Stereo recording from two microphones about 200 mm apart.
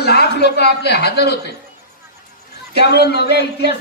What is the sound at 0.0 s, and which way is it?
A man's voice, 55° left (ahead or behind).